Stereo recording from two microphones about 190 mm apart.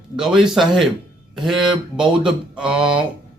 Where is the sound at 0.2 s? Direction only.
Centre (ahead or behind).